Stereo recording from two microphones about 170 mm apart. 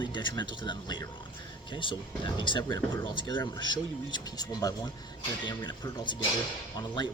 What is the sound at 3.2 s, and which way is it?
Speech, 90° right.